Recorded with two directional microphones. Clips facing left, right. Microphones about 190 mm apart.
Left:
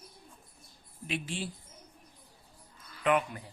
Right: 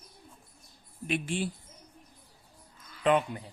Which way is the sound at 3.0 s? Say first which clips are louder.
Right 2 dB; 25° right (ahead or behind).